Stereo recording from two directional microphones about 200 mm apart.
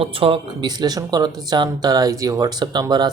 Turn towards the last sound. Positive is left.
turn(degrees=-20)  # may be behind; listen again after turning